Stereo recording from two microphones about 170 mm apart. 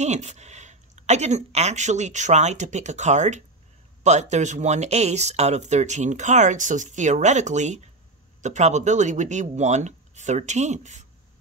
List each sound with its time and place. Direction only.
0.0 s speech: 40° right (ahead or behind)